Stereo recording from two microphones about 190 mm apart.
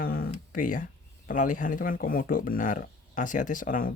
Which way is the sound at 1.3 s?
45° left (ahead or behind).